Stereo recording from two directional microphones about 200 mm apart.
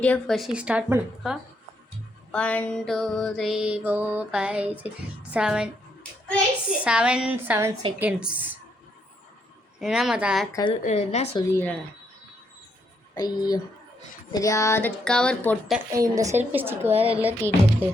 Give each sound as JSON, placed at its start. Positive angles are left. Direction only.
{"t": 0.0, "sound": "music", "side_deg": 5}
{"t": 2.3, "sound": "music", "side_deg": 5}
{"t": 5.3, "sound": "speech", "side_deg": -5}
{"t": 6.7, "sound": "music", "side_deg": -5}
{"t": 9.7, "sound": "music", "side_deg": 0}
{"t": 10.5, "sound": "speech", "side_deg": 25}
{"t": 10.8, "sound": "a woman's voice", "side_deg": 35}
{"t": 11.3, "sound": "speech", "side_deg": 10}
{"t": 13.1, "sound": "speech", "side_deg": 20}
{"t": 16.0, "sound": "music", "side_deg": -15}